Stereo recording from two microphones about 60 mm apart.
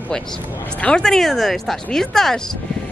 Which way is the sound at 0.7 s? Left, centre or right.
Left.